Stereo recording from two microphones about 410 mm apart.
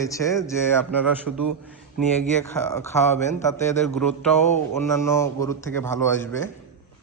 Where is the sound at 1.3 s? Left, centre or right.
Right.